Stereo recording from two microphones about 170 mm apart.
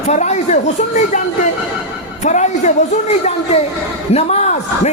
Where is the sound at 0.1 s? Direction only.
45° left (ahead or behind).